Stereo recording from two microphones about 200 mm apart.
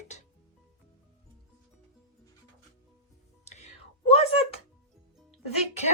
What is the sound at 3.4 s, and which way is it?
Whispering, 35° left (ahead or behind).